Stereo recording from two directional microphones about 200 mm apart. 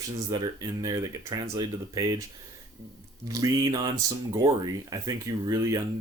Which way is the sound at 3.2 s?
15° right (ahead or behind).